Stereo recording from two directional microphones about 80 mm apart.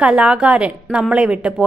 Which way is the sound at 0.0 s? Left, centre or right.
Centre.